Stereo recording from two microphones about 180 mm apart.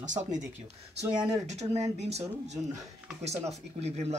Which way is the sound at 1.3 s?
40° right (ahead or behind).